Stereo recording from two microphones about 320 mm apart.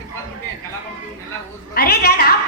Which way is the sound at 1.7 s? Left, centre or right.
Left.